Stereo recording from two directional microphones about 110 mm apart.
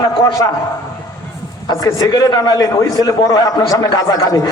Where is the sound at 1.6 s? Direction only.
35° left (ahead or behind).